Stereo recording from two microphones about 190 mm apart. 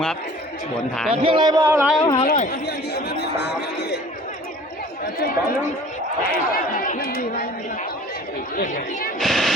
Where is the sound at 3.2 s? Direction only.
60° left (ahead or behind).